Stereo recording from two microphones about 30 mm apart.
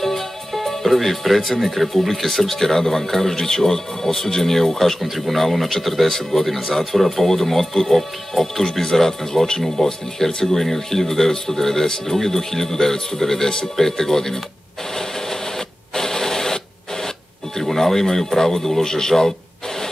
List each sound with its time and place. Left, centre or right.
0.0 s music: centre
1.5 s speech: centre
5.1 s speech: centre
6.0 s speech: centre
6.4 s speech: centre
15.0 s printer: centre
17.6 s speech: centre